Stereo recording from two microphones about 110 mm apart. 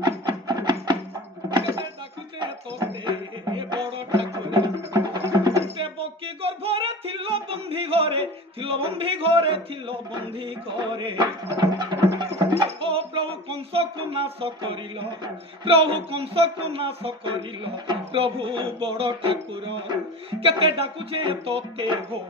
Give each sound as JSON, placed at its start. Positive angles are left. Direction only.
{"t": 0.0, "sound": "music", "side_deg": -40}
{"t": 2.4, "sound": "music", "side_deg": -45}
{"t": 4.9, "sound": "music", "side_deg": -35}
{"t": 5.8, "sound": "music", "side_deg": -55}
{"t": 10.8, "sound": "a sound", "side_deg": -50}
{"t": 11.4, "sound": "music", "side_deg": -30}
{"t": 12.8, "sound": "music", "side_deg": -55}
{"t": 15.6, "sound": "speech", "side_deg": -55}